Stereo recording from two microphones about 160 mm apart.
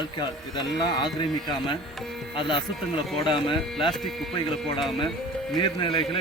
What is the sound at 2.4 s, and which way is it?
Speech, 30° left (ahead or behind).